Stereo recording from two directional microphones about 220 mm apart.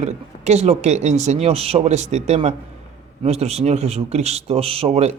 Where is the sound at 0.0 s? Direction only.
30° right (ahead or behind).